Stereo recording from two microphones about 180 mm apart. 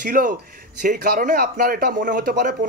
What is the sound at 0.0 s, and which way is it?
Speech, 50° right (ahead or behind).